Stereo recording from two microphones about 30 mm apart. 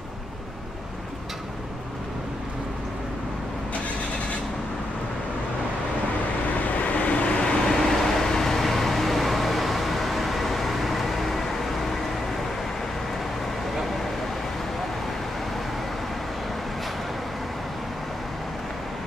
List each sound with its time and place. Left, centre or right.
6.8 s vehicle: left
7.6 s vehicle: centre